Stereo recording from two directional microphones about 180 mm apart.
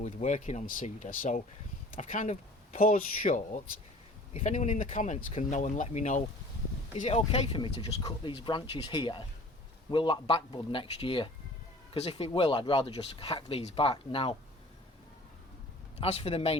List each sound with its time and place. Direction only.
0.0 s speech: 40° left (ahead or behind)
16.0 s speech: 35° left (ahead or behind)